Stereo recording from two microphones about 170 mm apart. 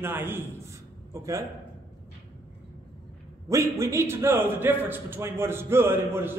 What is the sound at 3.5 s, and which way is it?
A man's voice, 20° right (ahead or behind).